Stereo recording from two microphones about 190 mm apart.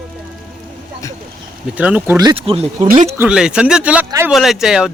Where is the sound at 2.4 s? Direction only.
30° right (ahead or behind).